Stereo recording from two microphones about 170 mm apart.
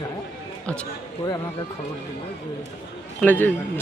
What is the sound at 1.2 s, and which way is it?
Speech, 25° left (ahead or behind).